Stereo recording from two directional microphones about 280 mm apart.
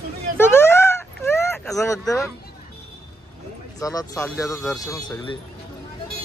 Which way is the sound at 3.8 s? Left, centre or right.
Centre.